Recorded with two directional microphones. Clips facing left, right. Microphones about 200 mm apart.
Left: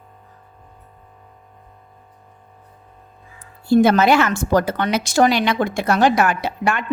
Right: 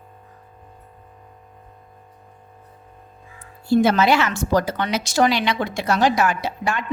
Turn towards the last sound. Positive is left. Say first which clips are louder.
# left 3 dB
turn(degrees=60)  # may be behind; listen again after turning